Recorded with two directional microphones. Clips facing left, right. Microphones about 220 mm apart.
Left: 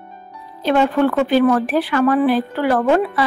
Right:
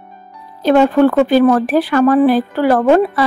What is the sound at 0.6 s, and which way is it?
Speech, 45° right (ahead or behind).